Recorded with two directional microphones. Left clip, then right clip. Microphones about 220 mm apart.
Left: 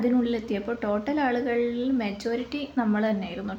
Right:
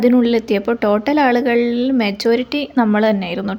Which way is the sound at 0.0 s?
45° right (ahead or behind).